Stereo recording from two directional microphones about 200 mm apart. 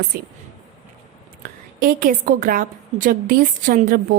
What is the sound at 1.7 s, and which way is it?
A woman's voice, 45° right (ahead or behind).